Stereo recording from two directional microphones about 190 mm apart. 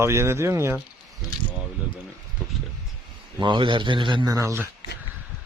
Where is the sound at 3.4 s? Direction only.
25° right (ahead or behind).